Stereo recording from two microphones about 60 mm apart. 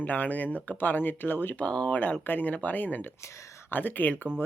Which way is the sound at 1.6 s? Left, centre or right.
Centre.